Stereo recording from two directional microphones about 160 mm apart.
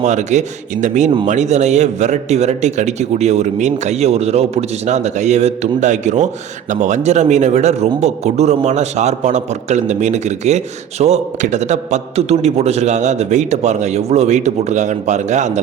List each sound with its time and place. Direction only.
0.0 s a man's voice: 45° right (ahead or behind)